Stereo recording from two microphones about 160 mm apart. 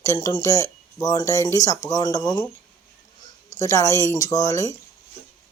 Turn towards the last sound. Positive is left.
turn(degrees=20)  # may be behind; listen again after turning